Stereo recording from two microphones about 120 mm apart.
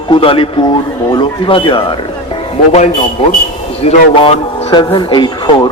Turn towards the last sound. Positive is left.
turn(degrees=40)  # may be behind; listen again after turning